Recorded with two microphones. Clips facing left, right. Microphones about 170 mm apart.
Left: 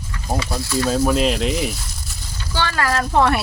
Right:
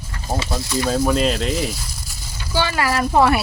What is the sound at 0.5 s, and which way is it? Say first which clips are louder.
Speech: left 1 dB; 20° right (ahead or behind).